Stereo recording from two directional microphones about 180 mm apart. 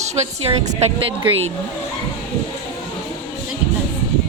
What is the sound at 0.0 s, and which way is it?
Speech, 40° right (ahead or behind).